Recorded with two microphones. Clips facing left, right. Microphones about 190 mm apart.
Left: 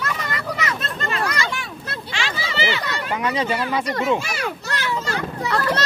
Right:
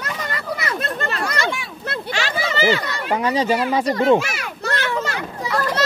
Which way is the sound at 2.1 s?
45° right (ahead or behind).